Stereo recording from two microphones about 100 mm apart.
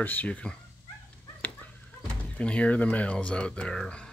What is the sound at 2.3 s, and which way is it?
Speech, 10° left (ahead or behind).